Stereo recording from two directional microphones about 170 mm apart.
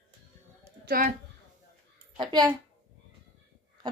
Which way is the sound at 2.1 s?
25° right (ahead or behind).